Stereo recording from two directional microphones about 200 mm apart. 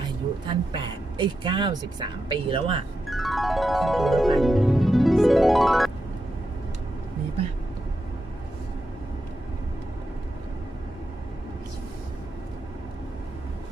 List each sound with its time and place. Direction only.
0.4 s speech: 25° right (ahead or behind)
3.1 s music: centre (ahead or behind)